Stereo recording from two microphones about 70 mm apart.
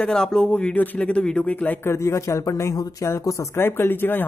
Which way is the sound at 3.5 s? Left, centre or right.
Left.